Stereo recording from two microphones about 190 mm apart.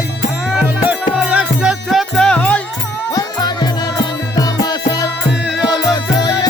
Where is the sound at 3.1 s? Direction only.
20° left (ahead or behind).